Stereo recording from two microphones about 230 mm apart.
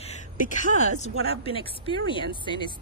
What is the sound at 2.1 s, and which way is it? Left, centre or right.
Speech, left.